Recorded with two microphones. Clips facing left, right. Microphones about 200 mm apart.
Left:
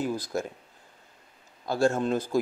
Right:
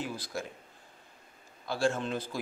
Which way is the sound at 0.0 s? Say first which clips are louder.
Left 7 dB; 45° left (ahead or behind).